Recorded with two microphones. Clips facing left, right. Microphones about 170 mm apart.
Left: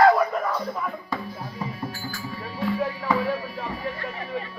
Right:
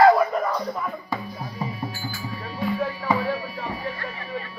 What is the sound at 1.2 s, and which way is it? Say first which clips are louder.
Music: right 1 dB; centre (ahead or behind).